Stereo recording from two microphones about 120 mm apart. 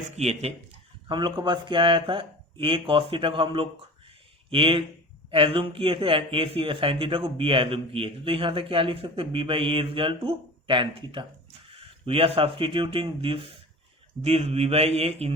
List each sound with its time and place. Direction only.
0.2 s speech: 65° right (ahead or behind)
1.0 s a man's voice: 40° right (ahead or behind)
14.2 s speech: 60° right (ahead or behind)